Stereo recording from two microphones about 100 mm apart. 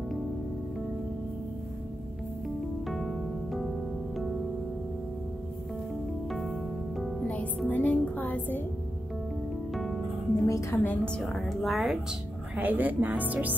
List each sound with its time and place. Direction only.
2.9 s keyboard: centre (ahead or behind)
6.3 s music: centre (ahead or behind)
7.2 s music: 15° left (ahead or behind)
9.8 s music: centre (ahead or behind)
10.4 s a woman's voice: 30° left (ahead or behind)
11.1 s speech: 5° left (ahead or behind)
12.5 s a woman's voice: 15° right (ahead or behind)